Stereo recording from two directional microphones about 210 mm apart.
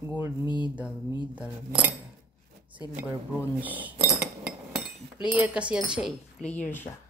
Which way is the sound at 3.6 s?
10° right (ahead or behind).